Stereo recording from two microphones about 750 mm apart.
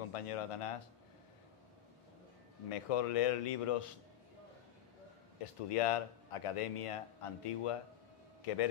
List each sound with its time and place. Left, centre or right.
0.1 s a man's voice: left
2.7 s a man's voice: left
5.4 s a man's voice: left